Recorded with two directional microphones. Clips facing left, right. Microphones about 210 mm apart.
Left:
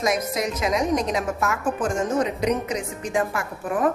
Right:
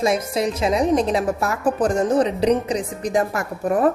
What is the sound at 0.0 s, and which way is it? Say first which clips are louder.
A woman's voice: right 4 dB; 30° right (ahead or behind).